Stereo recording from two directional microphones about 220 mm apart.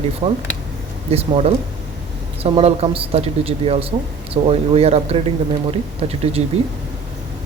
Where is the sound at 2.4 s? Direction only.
25° right (ahead or behind).